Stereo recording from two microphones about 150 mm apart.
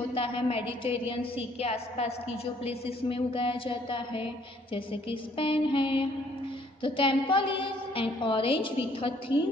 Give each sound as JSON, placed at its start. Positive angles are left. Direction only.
{"t": 0.1, "sound": "a woman's voice", "side_deg": 40}